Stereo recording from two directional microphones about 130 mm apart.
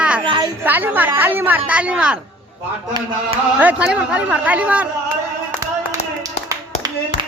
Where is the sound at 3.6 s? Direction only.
10° right (ahead or behind).